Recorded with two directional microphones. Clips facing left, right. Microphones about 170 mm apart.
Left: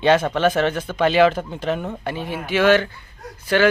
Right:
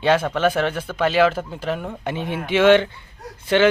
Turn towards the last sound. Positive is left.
turn(degrees=-25)  # may be behind; listen again after turning